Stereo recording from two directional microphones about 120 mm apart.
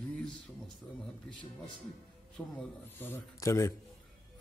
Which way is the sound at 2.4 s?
5° left (ahead or behind).